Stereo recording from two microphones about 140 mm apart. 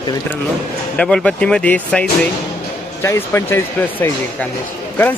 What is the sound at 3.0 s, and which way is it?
Speech, 20° left (ahead or behind).